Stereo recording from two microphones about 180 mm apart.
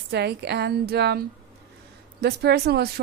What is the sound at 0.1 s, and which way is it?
Speech, 65° right (ahead or behind).